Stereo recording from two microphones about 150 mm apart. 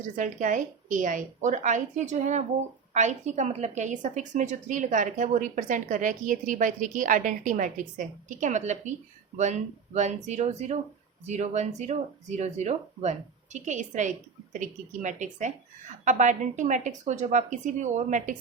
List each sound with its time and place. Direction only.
0.2 s a woman's voice: 55° right (ahead or behind)